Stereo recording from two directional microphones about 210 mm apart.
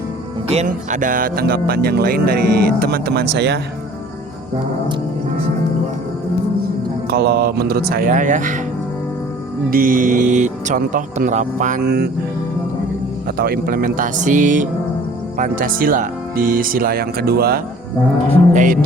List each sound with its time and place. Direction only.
0.5 s speech: 35° right (ahead or behind); by 3.6 s 55° right (ahead or behind)
7.1 s speech: 50° right (ahead or behind)
9.6 s speech: 40° right (ahead or behind)
13.3 s speech: 45° right (ahead or behind)